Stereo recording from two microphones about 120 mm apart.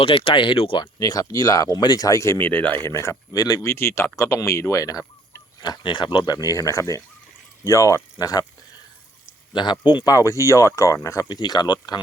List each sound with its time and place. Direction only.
0.0 s speech: 50° left (ahead or behind)
0.9 s speech: 30° left (ahead or behind)
5.6 s speech: 40° left (ahead or behind)
9.5 s speech: 40° left (ahead or behind)